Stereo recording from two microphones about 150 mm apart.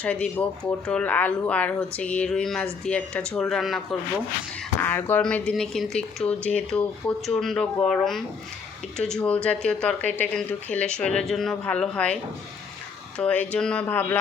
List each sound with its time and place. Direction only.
0.0 s speech: 10° left (ahead or behind)
4.8 s speech: 15° left (ahead or behind)
13.1 s speech: 10° left (ahead or behind)